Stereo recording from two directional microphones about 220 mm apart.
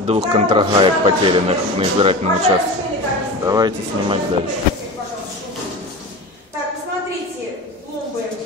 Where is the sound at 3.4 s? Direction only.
15° right (ahead or behind).